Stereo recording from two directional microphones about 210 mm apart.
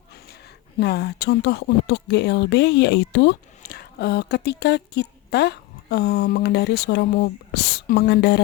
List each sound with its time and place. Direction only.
0.1 s speech: 50° left (ahead or behind)